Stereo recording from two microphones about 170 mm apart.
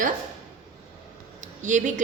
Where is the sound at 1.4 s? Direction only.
45° right (ahead or behind).